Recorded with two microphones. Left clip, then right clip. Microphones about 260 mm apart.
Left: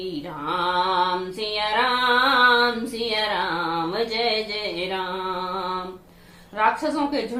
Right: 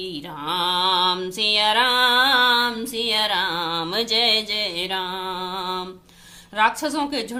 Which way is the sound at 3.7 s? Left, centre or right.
Right.